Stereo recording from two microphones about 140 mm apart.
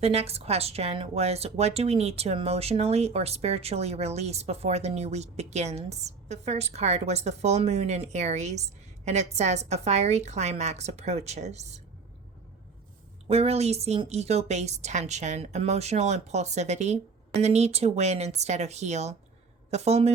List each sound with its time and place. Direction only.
0.0 s speech: 45° right (ahead or behind)
13.2 s speech: 45° right (ahead or behind)